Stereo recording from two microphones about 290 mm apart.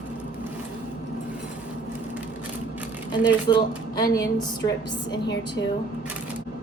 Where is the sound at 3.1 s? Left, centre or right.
Centre.